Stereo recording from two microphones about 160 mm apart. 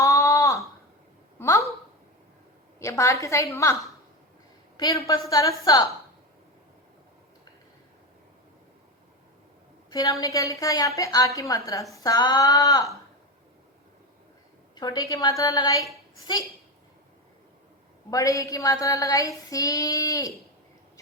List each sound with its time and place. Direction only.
0.0 s a sound: 20° left (ahead or behind)
2.7 s a woman's voice: 20° left (ahead or behind)
4.8 s a woman's voice: 20° left (ahead or behind)
9.9 s a woman's voice: 20° left (ahead or behind)
14.8 s a woman's voice: 20° left (ahead or behind)
18.1 s a woman's voice: 20° left (ahead or behind)